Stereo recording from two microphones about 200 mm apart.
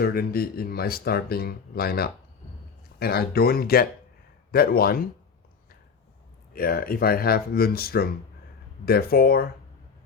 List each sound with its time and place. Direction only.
0.0 s speech: 50° left (ahead or behind)
6.5 s speech: 50° left (ahead or behind)